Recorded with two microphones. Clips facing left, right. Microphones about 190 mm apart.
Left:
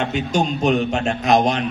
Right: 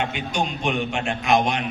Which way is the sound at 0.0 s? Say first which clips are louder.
Left 5 dB; 40° left (ahead or behind).